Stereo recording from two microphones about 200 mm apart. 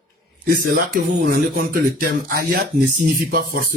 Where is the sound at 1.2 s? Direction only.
45° right (ahead or behind).